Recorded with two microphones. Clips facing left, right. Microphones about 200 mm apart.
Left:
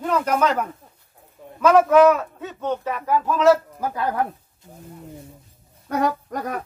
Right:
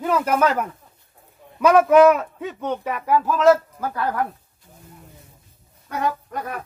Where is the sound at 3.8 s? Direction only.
20° left (ahead or behind).